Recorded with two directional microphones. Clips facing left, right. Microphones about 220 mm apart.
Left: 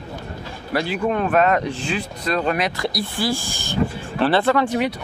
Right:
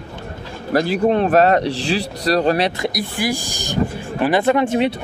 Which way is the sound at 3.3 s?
40° right (ahead or behind).